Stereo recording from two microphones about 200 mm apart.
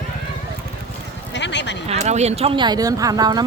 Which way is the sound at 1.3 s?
60° left (ahead or behind).